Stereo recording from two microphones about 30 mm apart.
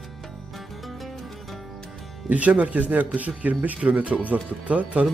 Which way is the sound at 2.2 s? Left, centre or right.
Right.